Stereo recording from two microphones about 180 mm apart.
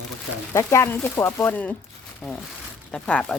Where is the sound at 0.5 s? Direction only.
15° left (ahead or behind).